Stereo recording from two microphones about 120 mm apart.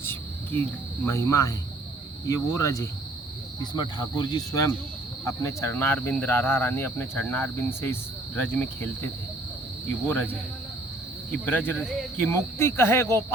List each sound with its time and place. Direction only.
0.0 s cricket: 20° left (ahead or behind)
1.0 s speech: 25° left (ahead or behind)
3.6 s cricket: 35° left (ahead or behind)
5.2 s speech: 25° left (ahead or behind)
10.1 s speech: 15° left (ahead or behind)